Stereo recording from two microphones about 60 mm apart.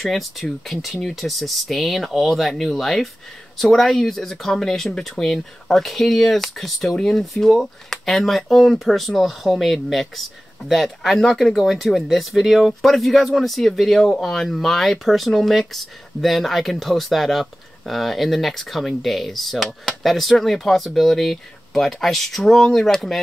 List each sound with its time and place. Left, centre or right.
0.0 s speech: centre